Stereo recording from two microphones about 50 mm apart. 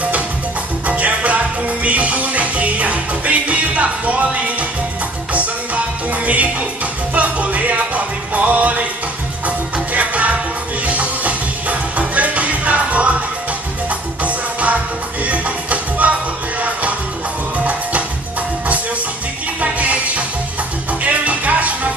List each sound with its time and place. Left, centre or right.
0.8 s music: right
6.2 s music: right
9.9 s music: right
19.6 s music: right